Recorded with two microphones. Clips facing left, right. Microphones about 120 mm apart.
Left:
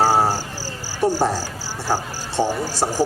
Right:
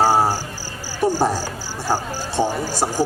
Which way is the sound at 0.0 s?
15° right (ahead or behind).